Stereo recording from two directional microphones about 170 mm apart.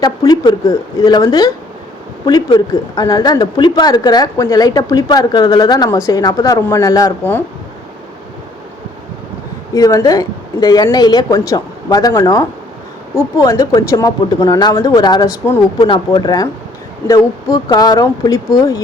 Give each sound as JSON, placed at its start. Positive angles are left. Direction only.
{"t": 0.0, "sound": "speech", "side_deg": 20}
{"t": 9.7, "sound": "speech", "side_deg": 20}